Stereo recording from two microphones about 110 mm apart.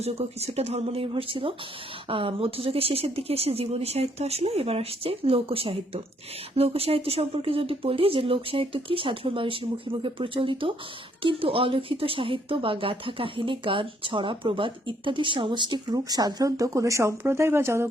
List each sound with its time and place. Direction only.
0.0 s speech: 75° right (ahead or behind)
1.1 s speech: 55° right (ahead or behind); by 17.8 s 25° right (ahead or behind)